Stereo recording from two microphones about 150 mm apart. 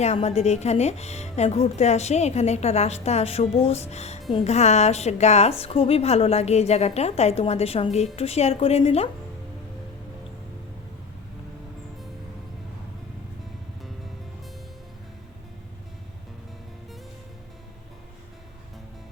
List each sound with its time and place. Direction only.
0.0 s a woman's voice: 45° left (ahead or behind)